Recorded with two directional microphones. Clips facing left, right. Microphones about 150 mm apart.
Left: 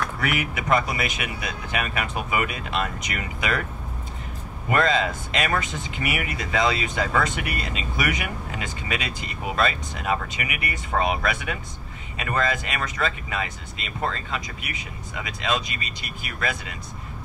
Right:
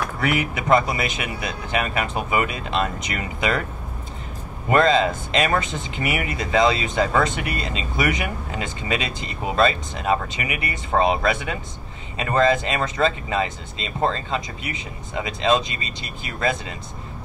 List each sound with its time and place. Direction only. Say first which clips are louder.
0.2 s speech: right 6 dB; 25° right (ahead or behind)
4.6 s speech: right 5 dB; 30° right (ahead or behind)